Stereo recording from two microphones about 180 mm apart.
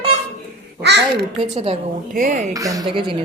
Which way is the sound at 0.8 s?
70° right (ahead or behind).